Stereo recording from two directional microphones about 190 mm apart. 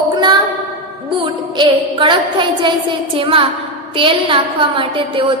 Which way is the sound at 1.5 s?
25° right (ahead or behind).